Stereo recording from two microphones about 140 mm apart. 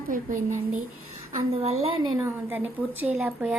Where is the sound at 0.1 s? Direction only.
70° right (ahead or behind).